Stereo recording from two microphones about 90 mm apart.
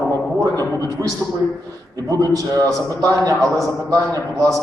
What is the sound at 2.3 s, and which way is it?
A man's voice, 35° right (ahead or behind).